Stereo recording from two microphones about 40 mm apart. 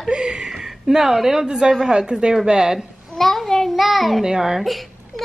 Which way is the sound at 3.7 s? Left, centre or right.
Centre.